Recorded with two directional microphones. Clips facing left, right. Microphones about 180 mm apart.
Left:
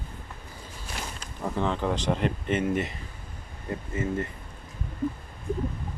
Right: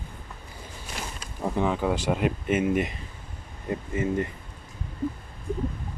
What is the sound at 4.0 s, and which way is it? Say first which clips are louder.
Speech: right 3 dB; 15° right (ahead or behind).